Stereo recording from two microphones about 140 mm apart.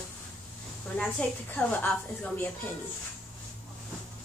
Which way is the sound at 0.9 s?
10° left (ahead or behind).